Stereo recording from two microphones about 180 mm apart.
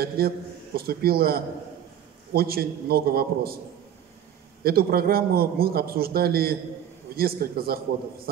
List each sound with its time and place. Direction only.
0.2 s a man's voice: 55° right (ahead or behind)
4.6 s a man's voice: 60° right (ahead or behind)